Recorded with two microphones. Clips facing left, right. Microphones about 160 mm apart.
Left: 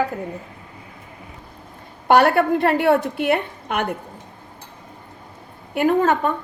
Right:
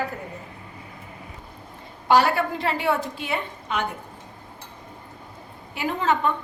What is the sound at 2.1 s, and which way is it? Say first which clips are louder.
A woman's voice: left 5 dB; 60° left (ahead or behind).